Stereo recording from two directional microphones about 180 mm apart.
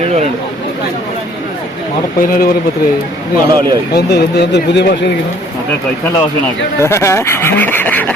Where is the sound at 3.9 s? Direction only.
65° left (ahead or behind).